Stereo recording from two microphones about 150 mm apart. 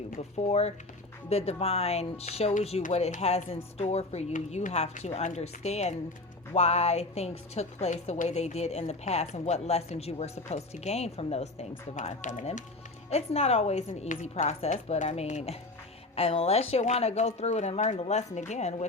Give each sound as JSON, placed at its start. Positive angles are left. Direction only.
{"t": 0.2, "sound": "a woman's voice", "side_deg": 45}